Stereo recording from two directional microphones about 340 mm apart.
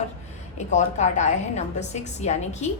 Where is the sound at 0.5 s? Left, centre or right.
Centre.